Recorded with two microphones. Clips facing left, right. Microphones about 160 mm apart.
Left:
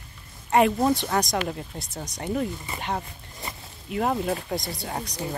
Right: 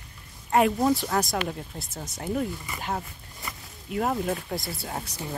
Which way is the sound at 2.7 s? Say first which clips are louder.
Left 1 dB; 30° left (ahead or behind).